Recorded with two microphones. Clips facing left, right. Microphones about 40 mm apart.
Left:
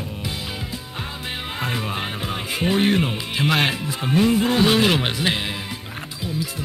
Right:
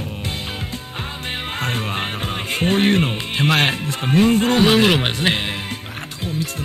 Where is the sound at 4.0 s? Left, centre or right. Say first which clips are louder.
Right 3 dB; centre.